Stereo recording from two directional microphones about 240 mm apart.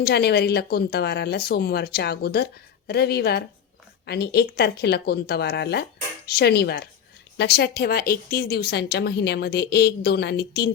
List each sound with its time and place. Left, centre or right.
0.0 s speech: left